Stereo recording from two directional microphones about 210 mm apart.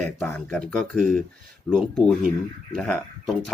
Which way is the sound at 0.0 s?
5° left (ahead or behind).